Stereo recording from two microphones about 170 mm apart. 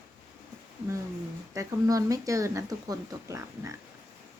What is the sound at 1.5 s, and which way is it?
Speech, 20° right (ahead or behind).